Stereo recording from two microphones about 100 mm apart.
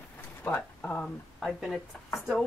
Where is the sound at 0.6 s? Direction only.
15° left (ahead or behind).